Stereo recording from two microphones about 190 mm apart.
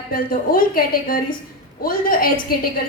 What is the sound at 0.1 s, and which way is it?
A woman's voice, 50° left (ahead or behind).